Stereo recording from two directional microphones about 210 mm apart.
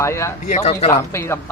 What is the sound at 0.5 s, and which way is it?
Speech, 30° left (ahead or behind).